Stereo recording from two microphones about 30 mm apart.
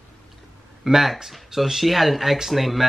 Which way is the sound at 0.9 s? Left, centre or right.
Centre.